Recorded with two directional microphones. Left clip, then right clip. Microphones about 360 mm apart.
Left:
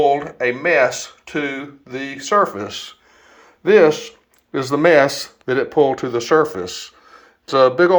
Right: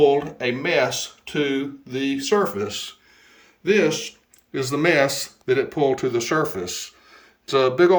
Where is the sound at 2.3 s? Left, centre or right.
Centre.